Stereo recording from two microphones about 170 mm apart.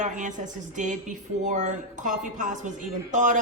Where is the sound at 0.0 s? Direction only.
50° right (ahead or behind).